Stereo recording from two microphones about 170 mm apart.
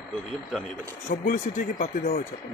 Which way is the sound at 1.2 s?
55° left (ahead or behind).